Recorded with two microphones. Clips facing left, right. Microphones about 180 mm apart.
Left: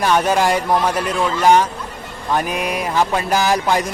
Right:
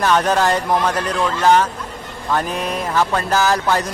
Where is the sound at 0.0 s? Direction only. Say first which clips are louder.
Even; 10° left (ahead or behind).